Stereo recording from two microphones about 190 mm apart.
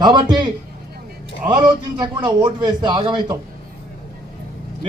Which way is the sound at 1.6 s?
25° right (ahead or behind).